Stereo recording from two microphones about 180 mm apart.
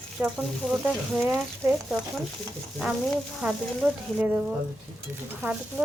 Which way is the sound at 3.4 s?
5° right (ahead or behind).